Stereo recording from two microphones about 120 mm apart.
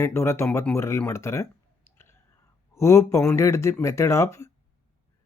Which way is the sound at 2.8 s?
25° left (ahead or behind).